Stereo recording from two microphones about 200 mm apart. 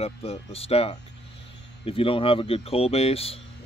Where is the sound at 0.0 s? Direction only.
30° left (ahead or behind).